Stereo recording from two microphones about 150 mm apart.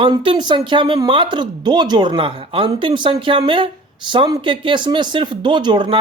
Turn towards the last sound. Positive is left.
turn(degrees=-30)  # may be behind; listen again after turning